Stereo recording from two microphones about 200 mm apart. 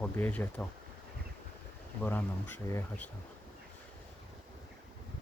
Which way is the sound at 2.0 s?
10° left (ahead or behind).